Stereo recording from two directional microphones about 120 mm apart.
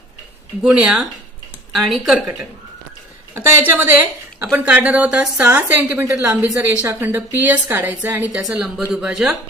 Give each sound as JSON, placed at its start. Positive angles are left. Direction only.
{"t": 0.6, "sound": "speech", "side_deg": -5}
{"t": 3.3, "sound": "a woman's voice", "side_deg": -15}
{"t": 8.5, "sound": "speech", "side_deg": -5}